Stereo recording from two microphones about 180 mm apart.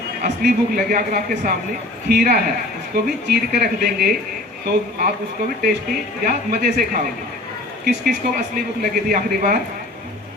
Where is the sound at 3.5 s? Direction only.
50° right (ahead or behind).